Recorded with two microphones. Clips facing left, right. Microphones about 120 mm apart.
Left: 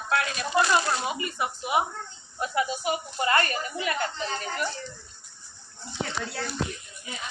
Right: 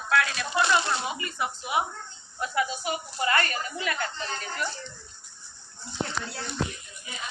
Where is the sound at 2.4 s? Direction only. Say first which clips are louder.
Left 1 dB; 30° left (ahead or behind).